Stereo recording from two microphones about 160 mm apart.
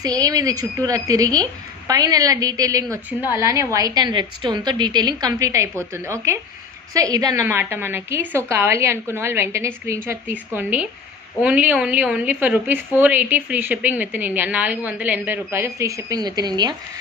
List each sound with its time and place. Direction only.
0.0 s a woman's voice: 25° right (ahead or behind)
2.9 s a woman's voice: 10° right (ahead or behind)